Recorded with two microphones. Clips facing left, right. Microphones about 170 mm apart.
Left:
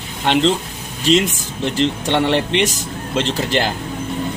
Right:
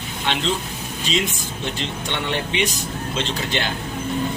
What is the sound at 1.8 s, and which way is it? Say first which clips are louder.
Speech: left 14 dB; 70° left (ahead or behind).